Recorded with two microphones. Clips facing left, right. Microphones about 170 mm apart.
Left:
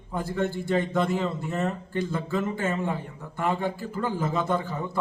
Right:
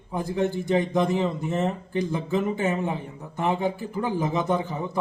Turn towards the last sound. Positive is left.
turn(degrees=-20)  # may be behind; listen again after turning